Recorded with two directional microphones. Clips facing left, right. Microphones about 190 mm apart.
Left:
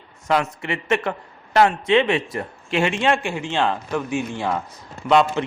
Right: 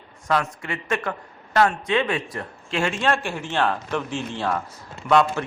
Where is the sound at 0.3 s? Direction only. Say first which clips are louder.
Left 3 dB; 25° left (ahead or behind).